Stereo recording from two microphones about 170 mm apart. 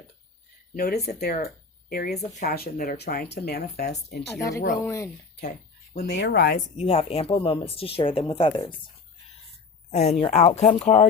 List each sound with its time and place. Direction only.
0.8 s speech: 70° left (ahead or behind)
4.3 s speech: 20° left (ahead or behind)
6.0 s speech: 75° left (ahead or behind)
6.7 s speech: 35° left (ahead or behind)
9.9 s speech: 40° left (ahead or behind)